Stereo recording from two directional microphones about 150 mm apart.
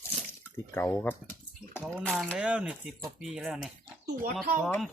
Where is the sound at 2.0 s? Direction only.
10° left (ahead or behind).